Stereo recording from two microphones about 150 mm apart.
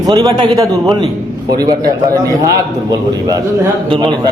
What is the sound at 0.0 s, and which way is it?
A man's voice, 25° right (ahead or behind).